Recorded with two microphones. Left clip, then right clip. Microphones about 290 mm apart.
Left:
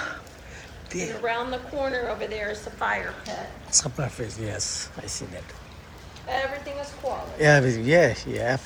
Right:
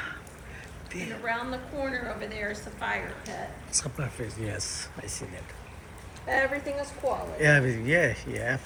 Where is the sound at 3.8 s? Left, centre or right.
Centre.